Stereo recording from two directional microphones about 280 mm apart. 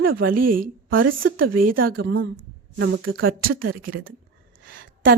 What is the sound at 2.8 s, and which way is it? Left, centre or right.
Speech, right.